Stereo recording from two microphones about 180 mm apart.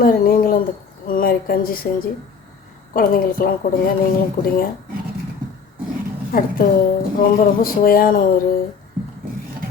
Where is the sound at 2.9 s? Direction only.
50° left (ahead or behind).